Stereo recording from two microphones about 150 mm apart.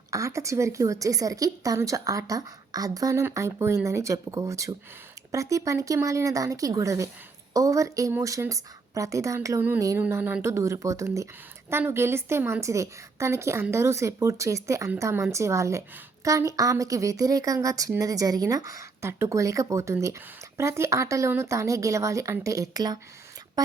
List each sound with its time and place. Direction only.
0.1 s a woman's voice: 20° right (ahead or behind)